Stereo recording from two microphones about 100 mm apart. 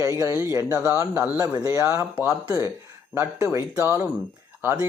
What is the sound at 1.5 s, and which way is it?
Speech, 35° right (ahead or behind).